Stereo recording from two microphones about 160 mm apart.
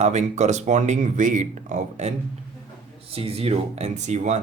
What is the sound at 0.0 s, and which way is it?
Speech, 45° right (ahead or behind).